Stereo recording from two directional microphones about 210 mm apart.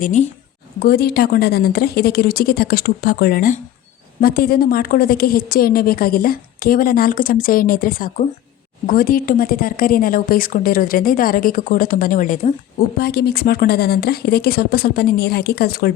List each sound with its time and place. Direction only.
0.0 s a woman's voice: 35° left (ahead or behind)
0.8 s a woman's voice: 50° left (ahead or behind)
13.0 s a woman's voice: 45° left (ahead or behind)